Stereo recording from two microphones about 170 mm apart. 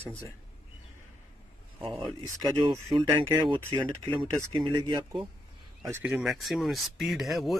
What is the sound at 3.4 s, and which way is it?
Speech, 30° right (ahead or behind).